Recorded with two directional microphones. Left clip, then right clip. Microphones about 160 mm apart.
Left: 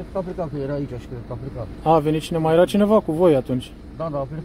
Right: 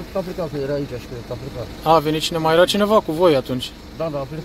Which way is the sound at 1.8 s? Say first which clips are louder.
Right 2 dB; 35° left (ahead or behind).